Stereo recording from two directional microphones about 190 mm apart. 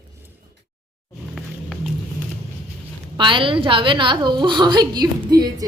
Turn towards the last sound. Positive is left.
turn(degrees=-20)  # may be behind; listen again after turning